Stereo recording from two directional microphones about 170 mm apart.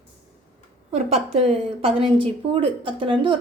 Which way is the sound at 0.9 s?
35° right (ahead or behind).